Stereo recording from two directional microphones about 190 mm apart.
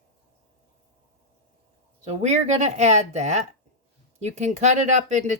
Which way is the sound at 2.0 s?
35° right (ahead or behind).